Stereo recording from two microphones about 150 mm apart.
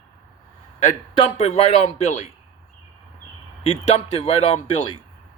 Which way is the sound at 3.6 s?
40° left (ahead or behind).